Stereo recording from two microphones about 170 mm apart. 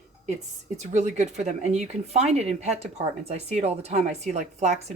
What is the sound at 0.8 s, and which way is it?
Speech, 40° right (ahead or behind).